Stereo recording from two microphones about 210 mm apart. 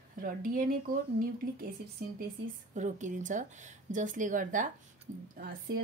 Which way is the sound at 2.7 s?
35° right (ahead or behind).